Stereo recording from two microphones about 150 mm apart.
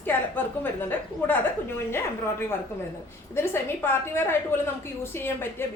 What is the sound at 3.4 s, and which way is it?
A woman's voice, 15° left (ahead or behind).